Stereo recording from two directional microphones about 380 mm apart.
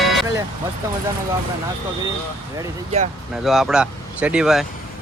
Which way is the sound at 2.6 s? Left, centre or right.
Centre.